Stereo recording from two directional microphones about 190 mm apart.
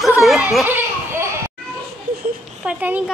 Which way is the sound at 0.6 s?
10° right (ahead or behind).